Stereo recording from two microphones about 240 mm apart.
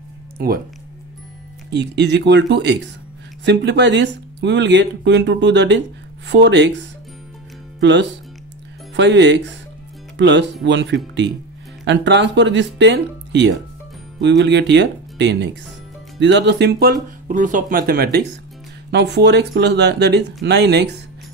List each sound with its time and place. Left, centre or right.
1.7 s speech: right
7.8 s speech: right